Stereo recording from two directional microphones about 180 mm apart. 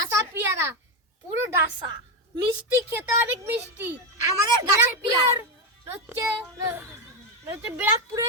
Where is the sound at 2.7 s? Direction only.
15° right (ahead or behind).